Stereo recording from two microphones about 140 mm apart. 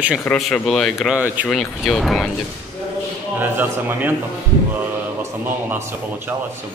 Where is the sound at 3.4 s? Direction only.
15° right (ahead or behind).